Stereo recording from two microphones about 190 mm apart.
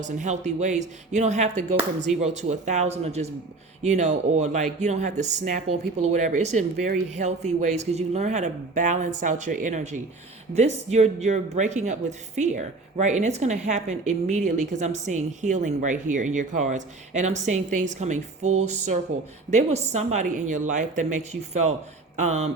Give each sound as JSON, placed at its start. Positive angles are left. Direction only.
{"t": 0.0, "sound": "a woman's voice", "side_deg": -40}